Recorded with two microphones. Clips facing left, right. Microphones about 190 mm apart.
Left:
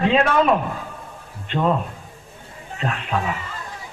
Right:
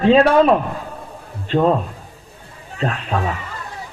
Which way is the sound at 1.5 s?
35° right (ahead or behind).